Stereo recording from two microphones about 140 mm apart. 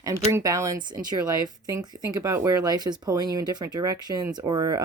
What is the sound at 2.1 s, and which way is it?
Speech, 20° right (ahead or behind).